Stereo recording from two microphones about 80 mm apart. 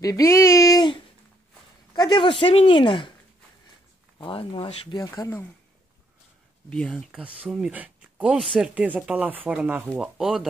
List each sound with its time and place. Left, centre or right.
0.0 s speech: left
2.0 s speech: left
4.9 s speech: left
6.9 s speech: centre
7.2 s speech: centre
7.7 s a sound: centre
8.3 s speech: centre
8.5 s speech: centre
9.9 s speech: centre